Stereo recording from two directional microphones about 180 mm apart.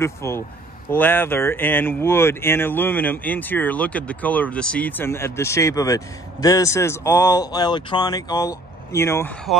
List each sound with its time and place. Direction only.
0.0 s speech: 15° left (ahead or behind)